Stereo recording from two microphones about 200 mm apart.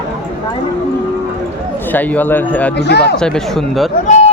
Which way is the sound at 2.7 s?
55° left (ahead or behind).